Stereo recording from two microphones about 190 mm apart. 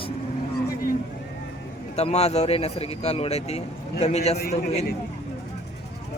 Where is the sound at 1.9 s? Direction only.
35° left (ahead or behind).